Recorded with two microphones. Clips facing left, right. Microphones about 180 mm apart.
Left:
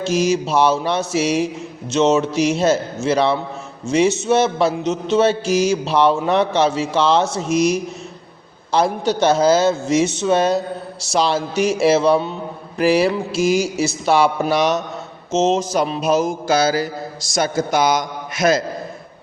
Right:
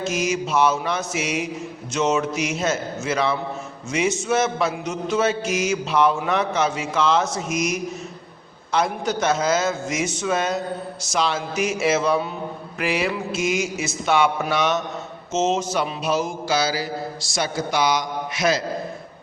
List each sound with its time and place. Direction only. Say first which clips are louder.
0.0 s a man's voice: left 6 dB; 30° left (ahead or behind)
15.4 s mantra: left 4 dB; 35° left (ahead or behind)